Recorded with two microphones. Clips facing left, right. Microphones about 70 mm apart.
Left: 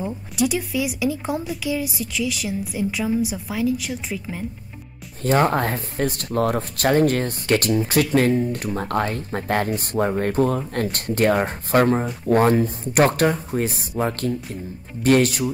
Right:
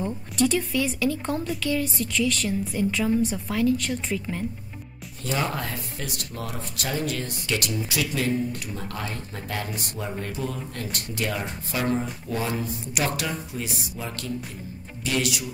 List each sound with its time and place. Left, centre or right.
0.0 s speech: centre
5.2 s speech: left